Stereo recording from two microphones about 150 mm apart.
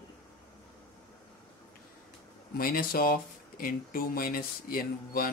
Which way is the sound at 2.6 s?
75° left (ahead or behind).